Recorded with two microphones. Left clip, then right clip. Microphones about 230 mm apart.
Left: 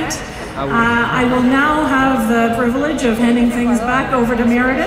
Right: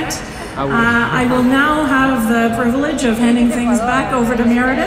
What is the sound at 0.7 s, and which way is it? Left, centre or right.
Music, right.